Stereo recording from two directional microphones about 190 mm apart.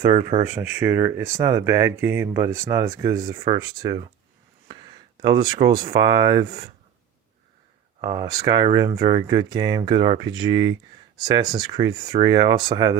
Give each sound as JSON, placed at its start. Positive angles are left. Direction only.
{"t": 0.1, "sound": "speech", "side_deg": -25}
{"t": 0.5, "sound": "speech", "side_deg": -10}
{"t": 8.0, "sound": "speech", "side_deg": -20}